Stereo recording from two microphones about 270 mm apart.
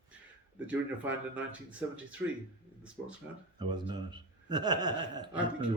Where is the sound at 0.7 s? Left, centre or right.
Centre.